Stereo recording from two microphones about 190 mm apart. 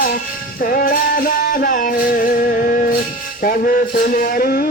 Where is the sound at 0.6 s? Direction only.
50° left (ahead or behind).